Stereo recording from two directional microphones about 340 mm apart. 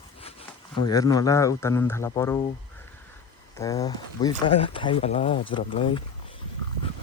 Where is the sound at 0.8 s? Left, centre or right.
Centre.